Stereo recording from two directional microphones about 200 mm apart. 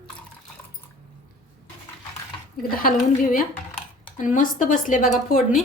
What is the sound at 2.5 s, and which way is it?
A woman's voice, 45° left (ahead or behind).